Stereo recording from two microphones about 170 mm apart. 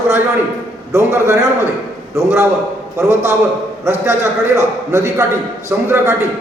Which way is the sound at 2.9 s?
15° right (ahead or behind).